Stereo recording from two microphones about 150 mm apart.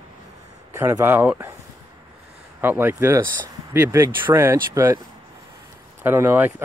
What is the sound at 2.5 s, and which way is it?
Speech, 15° right (ahead or behind).